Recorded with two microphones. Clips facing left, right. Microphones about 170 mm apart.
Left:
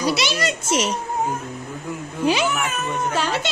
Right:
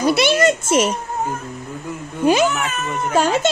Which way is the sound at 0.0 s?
55° right (ahead or behind).